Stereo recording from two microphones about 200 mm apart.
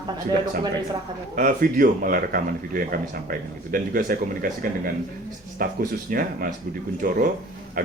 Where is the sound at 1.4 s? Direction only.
45° right (ahead or behind).